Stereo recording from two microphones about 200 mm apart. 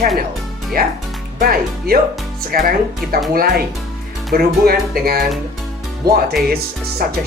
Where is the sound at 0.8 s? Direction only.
50° right (ahead or behind).